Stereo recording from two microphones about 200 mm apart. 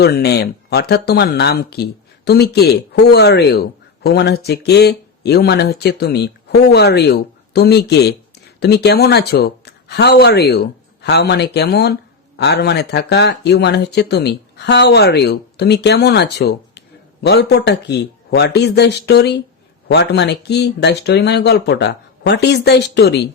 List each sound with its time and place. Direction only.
0.0 s speech: 55° left (ahead or behind)